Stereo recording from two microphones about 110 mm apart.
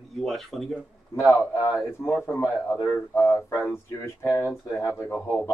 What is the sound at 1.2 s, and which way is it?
Speech, 25° left (ahead or behind).